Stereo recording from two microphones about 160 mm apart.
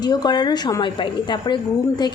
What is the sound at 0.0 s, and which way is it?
A woman's voice, 25° left (ahead or behind).